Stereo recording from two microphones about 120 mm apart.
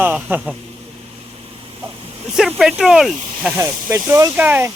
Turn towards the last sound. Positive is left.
turn(degrees=-15)  # may be behind; listen again after turning